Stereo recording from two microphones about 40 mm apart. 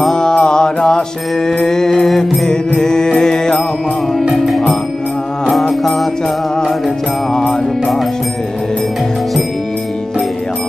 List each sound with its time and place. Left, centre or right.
0.1 s mantra: centre
2.5 s mantra: centre
4.2 s music: centre